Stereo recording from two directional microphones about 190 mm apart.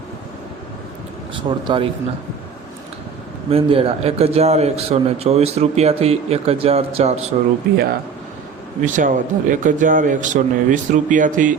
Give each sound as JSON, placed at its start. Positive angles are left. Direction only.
{"t": 1.3, "sound": "speech", "side_deg": -25}
{"t": 3.5, "sound": "a man's voice", "side_deg": -30}
{"t": 8.8, "sound": "a man's voice", "side_deg": -40}